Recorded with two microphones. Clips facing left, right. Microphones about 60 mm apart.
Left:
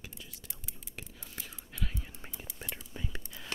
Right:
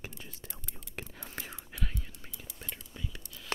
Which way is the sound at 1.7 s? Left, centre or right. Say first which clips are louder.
Even; centre.